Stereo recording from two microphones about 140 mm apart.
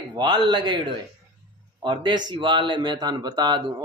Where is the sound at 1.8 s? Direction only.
35° right (ahead or behind).